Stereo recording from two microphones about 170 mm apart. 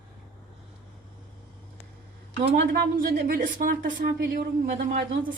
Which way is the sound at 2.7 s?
65° right (ahead or behind).